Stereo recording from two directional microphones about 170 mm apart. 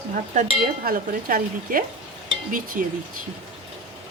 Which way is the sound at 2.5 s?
50° right (ahead or behind).